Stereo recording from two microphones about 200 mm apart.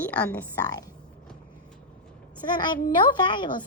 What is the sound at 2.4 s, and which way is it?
A woman's voice, 20° left (ahead or behind).